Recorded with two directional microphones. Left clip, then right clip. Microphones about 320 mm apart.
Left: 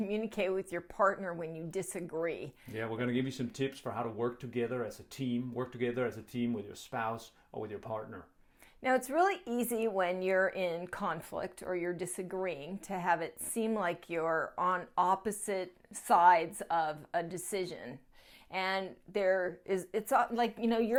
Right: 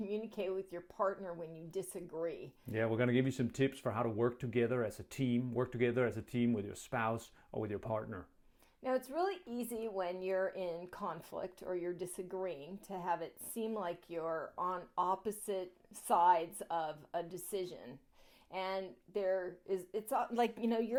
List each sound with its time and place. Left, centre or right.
0.1 s a woman's voice: centre
2.7 s speech: right
8.8 s a woman's voice: left
20.3 s a woman's voice: centre